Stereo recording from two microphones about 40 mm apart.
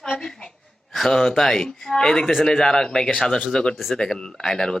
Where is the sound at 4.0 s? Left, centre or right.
Centre.